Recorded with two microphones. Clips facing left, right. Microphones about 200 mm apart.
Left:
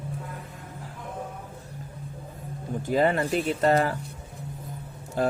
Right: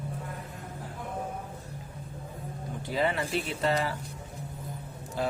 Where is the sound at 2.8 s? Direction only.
45° left (ahead or behind).